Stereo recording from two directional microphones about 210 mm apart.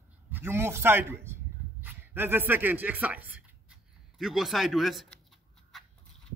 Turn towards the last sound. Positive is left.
turn(degrees=0)  # may be behind; listen again after turning